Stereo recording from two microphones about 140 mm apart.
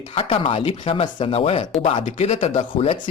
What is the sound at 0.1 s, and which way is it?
Speech, 40° left (ahead or behind).